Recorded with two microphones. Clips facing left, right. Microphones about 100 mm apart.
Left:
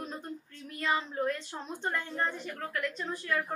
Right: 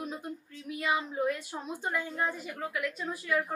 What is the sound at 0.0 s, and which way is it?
Speech, 5° right (ahead or behind).